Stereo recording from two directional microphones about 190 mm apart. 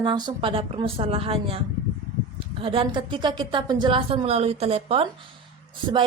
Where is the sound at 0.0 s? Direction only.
25° right (ahead or behind).